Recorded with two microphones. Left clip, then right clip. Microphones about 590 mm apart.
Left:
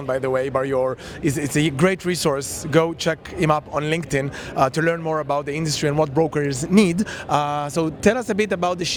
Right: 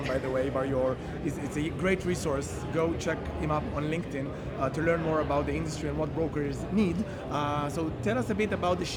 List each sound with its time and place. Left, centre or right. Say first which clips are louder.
0.1 s speech: left 10 dB; left